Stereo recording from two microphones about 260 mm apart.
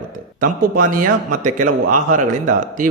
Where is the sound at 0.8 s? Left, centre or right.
Right.